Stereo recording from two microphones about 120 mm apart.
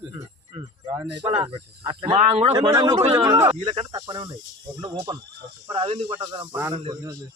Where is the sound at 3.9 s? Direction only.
35° right (ahead or behind).